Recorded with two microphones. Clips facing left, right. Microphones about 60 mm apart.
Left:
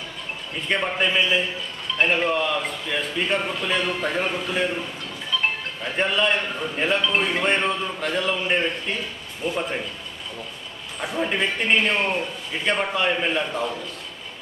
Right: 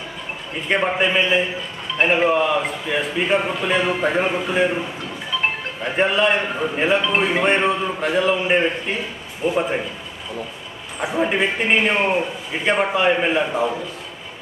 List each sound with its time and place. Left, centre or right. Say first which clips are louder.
0.5 s speech: right 4 dB; centre
11.0 s a man's voice: right 4 dB; centre